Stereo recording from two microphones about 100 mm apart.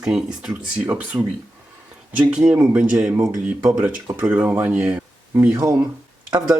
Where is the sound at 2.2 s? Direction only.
10° right (ahead or behind).